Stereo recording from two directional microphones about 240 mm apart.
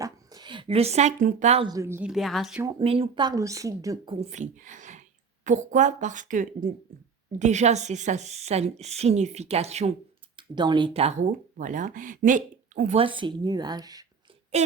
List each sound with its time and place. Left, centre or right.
0.0 s speech: centre
2.6 s a woman's voice: right
13.0 s speech: right